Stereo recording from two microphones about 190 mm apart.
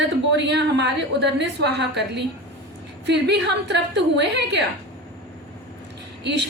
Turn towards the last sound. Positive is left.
turn(degrees=-65)  # may be behind; listen again after turning